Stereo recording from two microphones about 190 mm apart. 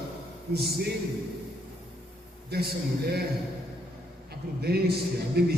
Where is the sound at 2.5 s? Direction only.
55° right (ahead or behind).